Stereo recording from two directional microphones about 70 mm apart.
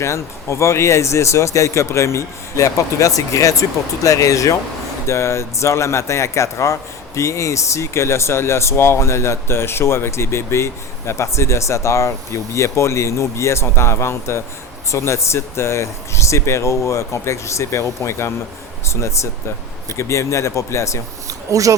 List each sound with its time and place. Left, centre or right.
0.0 s speech: left
5.0 s speech: left
21.2 s a sound: right